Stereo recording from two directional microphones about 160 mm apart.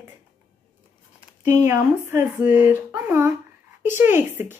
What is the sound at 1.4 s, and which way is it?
Speech, 15° right (ahead or behind).